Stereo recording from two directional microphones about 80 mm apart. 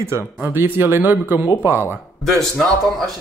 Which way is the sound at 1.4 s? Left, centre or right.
Left.